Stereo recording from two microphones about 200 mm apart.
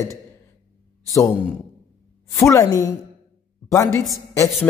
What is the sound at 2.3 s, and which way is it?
Speech, 15° left (ahead or behind).